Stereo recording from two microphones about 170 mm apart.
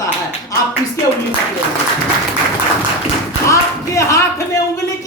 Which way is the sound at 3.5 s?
20° left (ahead or behind).